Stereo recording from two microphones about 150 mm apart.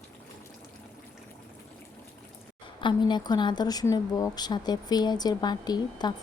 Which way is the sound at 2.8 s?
30° left (ahead or behind).